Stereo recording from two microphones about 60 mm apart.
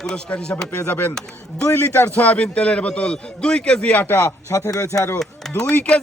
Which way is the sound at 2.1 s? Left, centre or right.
Left.